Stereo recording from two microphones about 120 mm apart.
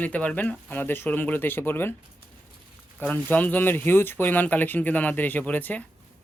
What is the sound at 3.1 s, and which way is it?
Speech, 15° left (ahead or behind).